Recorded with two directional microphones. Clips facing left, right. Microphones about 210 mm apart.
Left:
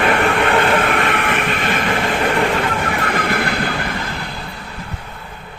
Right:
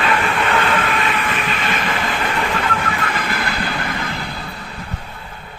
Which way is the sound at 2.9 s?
55° left (ahead or behind).